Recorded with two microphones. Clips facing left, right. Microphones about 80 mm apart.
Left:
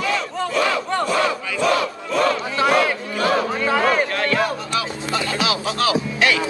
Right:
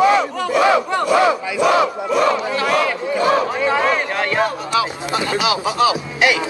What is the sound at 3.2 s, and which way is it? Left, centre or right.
Speech, centre.